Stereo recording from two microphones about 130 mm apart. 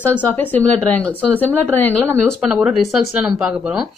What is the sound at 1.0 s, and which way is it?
Speech, 15° right (ahead or behind).